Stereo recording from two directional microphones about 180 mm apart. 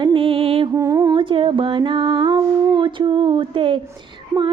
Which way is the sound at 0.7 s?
20° right (ahead or behind).